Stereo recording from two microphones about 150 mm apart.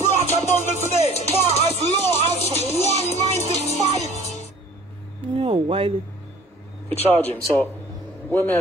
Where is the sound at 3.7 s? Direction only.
45° right (ahead or behind).